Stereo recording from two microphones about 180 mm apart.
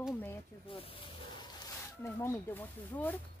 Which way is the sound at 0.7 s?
30° left (ahead or behind).